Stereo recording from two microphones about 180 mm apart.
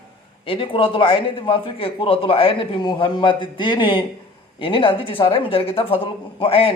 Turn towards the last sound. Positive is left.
turn(degrees=30)  # may be behind; listen again after turning